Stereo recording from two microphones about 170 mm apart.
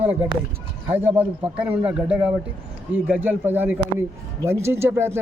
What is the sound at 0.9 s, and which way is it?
Speech, 15° right (ahead or behind).